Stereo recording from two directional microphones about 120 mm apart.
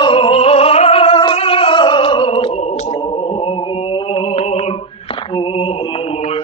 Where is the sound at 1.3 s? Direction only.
50° left (ahead or behind); by 2.9 s 65° left (ahead or behind).